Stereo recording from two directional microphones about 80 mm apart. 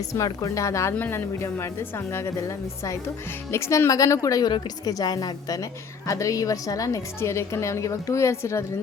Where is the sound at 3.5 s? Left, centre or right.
Left.